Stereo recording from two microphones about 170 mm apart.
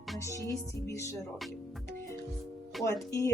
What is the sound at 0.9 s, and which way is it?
Speech, 15° left (ahead or behind).